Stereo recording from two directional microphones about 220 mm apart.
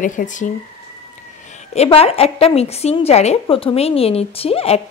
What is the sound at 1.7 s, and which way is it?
A woman's voice, 30° left (ahead or behind).